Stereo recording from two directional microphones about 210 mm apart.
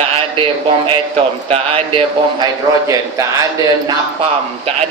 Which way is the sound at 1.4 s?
25° right (ahead or behind).